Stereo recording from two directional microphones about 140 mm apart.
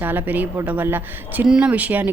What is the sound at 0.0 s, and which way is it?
A woman's voice, 15° right (ahead or behind).